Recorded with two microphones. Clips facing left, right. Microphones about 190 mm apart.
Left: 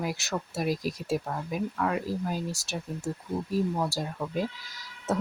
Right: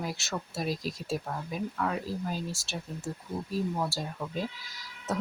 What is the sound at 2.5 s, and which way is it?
Speech, 20° left (ahead or behind).